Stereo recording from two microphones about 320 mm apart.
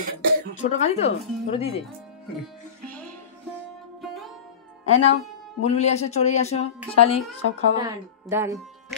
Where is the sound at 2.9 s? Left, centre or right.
Centre.